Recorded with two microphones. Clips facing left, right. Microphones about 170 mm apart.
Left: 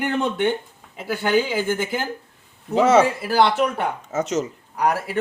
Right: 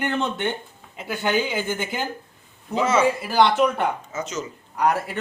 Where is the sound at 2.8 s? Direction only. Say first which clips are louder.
Left 6 dB; 70° left (ahead or behind).